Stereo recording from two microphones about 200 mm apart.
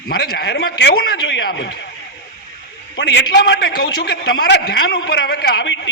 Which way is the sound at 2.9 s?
60° left (ahead or behind).